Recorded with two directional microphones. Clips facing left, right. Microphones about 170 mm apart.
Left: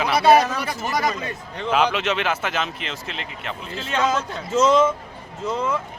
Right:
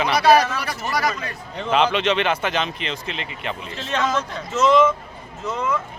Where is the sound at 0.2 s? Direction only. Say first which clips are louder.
Left 1 dB; 25° left (ahead or behind).